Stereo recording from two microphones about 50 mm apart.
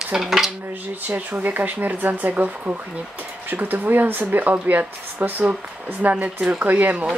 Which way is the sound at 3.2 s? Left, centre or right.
Right.